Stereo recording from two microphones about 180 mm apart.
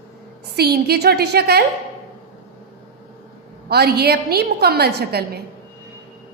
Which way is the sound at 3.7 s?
60° right (ahead or behind).